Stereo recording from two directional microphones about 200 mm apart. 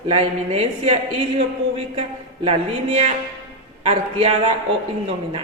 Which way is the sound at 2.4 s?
30° right (ahead or behind).